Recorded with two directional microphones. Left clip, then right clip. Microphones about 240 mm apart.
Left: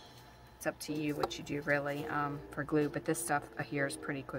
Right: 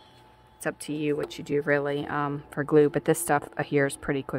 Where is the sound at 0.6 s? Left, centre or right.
Right.